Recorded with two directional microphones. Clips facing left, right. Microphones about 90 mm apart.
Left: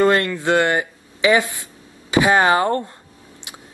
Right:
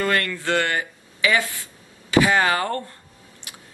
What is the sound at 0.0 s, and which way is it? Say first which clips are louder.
Speech: left 7 dB; 25° left (ahead or behind).